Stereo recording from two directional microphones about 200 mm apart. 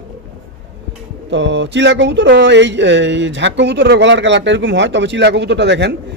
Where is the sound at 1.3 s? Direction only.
65° right (ahead or behind).